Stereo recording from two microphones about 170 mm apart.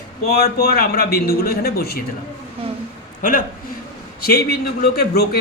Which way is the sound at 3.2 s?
55° left (ahead or behind).